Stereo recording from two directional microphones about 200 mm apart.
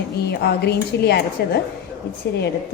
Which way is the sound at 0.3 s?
55° left (ahead or behind).